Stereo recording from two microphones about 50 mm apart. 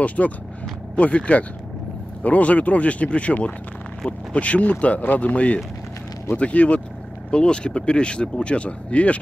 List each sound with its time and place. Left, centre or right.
0.0 s speech: left